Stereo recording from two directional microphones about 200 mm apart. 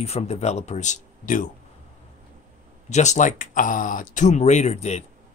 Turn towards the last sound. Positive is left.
turn(degrees=35)  # may be behind; listen again after turning